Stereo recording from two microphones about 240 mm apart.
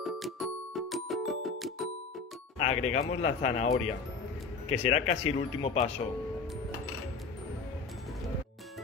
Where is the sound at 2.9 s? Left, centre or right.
Left.